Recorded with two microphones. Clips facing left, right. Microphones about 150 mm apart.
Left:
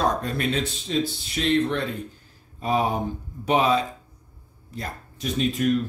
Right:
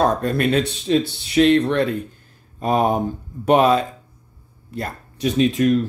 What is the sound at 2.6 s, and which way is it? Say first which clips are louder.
Speech: right 5 dB; 50° right (ahead or behind).